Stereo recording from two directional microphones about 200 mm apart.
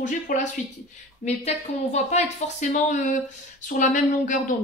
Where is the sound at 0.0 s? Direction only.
40° left (ahead or behind).